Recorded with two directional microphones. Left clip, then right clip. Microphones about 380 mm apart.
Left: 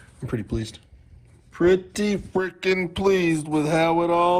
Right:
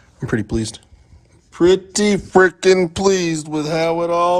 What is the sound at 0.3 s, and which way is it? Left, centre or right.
Speech, right.